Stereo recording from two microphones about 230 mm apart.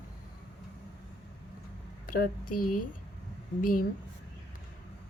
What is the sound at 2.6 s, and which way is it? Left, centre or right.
Speech, left.